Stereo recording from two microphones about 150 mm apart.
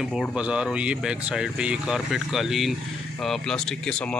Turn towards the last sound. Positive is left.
turn(degrees=5)  # may be behind; listen again after turning